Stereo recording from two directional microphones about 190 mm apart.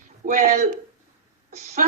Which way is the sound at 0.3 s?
40° right (ahead or behind).